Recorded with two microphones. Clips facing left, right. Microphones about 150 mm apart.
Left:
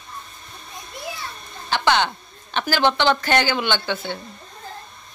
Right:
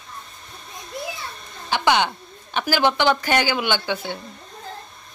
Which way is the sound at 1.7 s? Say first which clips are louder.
Even; 10° right (ahead or behind).